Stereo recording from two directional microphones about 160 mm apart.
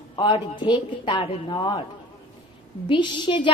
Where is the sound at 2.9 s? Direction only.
30° left (ahead or behind).